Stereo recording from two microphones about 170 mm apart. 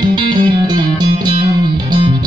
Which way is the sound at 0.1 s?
25° right (ahead or behind).